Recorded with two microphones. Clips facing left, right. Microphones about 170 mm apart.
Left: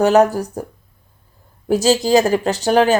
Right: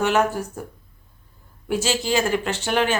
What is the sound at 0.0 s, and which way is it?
Speech, 40° left (ahead or behind).